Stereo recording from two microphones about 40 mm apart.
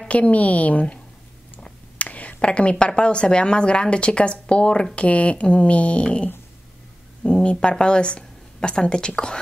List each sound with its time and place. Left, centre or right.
0.1 s speech: left
2.0 s speech: left
7.2 s speech: left